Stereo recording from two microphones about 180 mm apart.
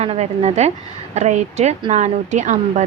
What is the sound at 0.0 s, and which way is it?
A woman's voice, 35° right (ahead or behind).